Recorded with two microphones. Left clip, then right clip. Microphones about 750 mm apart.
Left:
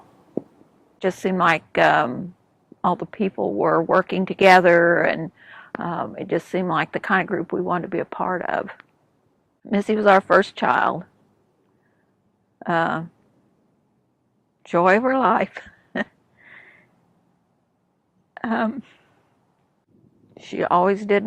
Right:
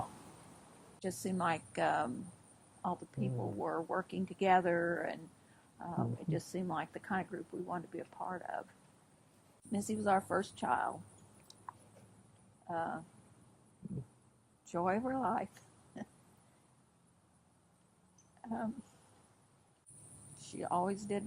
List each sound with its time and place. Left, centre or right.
0.9 s speech: left
9.7 s speech: left
12.6 s speech: left
14.7 s speech: left
18.4 s speech: left
20.5 s speech: left